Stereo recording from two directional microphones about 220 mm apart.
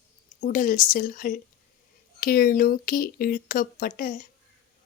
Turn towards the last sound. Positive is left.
turn(degrees=40)  # may be behind; listen again after turning